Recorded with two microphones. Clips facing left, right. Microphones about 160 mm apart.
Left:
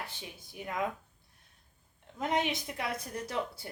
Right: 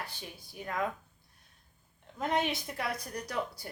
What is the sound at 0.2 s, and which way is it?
Speech, 15° left (ahead or behind).